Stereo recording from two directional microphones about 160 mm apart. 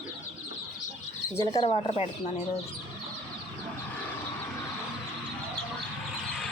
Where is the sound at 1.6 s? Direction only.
35° left (ahead or behind).